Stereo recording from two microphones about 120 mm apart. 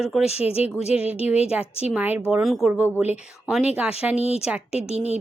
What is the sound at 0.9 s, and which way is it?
Speech, 10° right (ahead or behind).